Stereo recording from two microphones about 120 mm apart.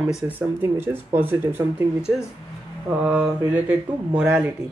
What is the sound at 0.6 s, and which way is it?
Speech, 20° right (ahead or behind).